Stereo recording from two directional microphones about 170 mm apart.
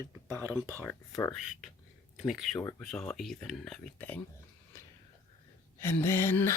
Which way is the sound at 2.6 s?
15° left (ahead or behind).